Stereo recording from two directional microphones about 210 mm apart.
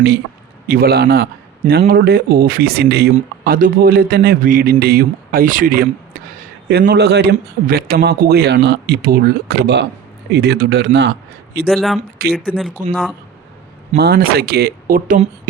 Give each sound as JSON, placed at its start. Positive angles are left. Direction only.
{"t": 0.7, "sound": "a man's voice", "side_deg": -45}
{"t": 11.7, "sound": "speech", "side_deg": 0}
{"t": 13.9, "sound": "speech", "side_deg": -50}